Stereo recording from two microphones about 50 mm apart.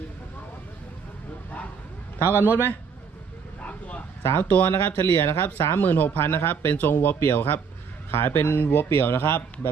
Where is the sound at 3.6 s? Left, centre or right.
Left.